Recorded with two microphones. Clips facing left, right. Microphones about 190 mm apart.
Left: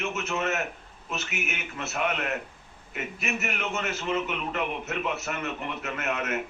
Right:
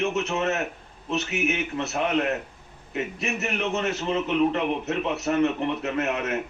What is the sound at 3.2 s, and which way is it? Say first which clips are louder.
A man's voice: right 2 dB; 35° right (ahead or behind).